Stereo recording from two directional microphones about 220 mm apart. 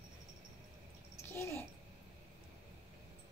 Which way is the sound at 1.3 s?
10° left (ahead or behind).